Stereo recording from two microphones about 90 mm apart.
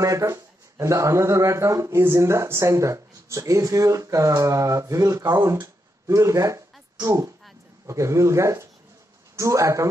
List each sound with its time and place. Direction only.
0.0 s speech: 35° right (ahead or behind)